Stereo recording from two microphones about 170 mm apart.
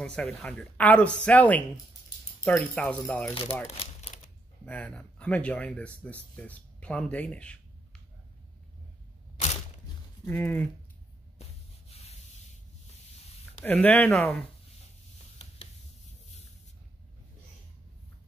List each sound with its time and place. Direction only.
0.0 s a woman's voice: 5° left (ahead or behind)
3.6 s crumpling: 45° left (ahead or behind)
4.6 s a woman's voice: 10° left (ahead or behind)
10.2 s a woman's voice: 10° left (ahead or behind)
11.9 s sanding: 40° left (ahead or behind)
13.6 s a woman's voice: 10° left (ahead or behind)